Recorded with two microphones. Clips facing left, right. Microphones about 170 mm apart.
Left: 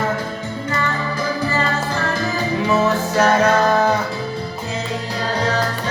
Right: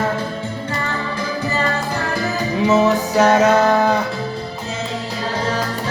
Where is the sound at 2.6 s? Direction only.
20° right (ahead or behind).